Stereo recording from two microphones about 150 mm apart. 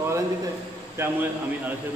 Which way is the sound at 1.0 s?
15° right (ahead or behind).